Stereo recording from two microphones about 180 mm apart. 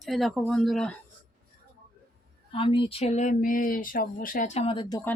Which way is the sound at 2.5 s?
30° left (ahead or behind).